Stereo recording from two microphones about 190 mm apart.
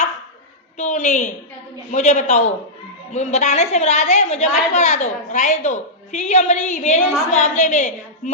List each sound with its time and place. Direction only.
0.8 s a woman's voice: 35° left (ahead or behind)